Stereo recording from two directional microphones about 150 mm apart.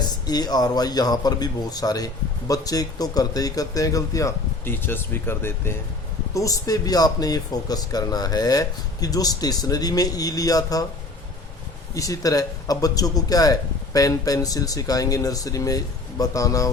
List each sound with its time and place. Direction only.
0.0 s a man's voice: 25° left (ahead or behind)
11.9 s a man's voice: 20° left (ahead or behind)